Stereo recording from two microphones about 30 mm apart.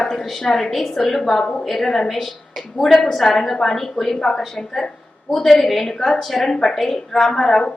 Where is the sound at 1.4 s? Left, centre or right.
Left.